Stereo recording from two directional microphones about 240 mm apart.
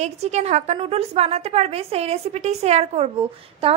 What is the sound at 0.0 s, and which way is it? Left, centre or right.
A woman's voice, right.